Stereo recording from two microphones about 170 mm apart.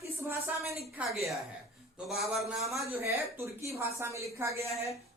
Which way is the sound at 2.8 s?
15° right (ahead or behind).